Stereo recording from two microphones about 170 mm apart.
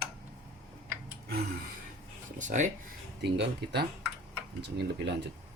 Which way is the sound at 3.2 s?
85° right.